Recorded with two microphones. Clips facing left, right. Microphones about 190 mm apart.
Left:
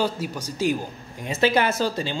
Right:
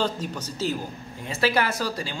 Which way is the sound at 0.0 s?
10° left (ahead or behind).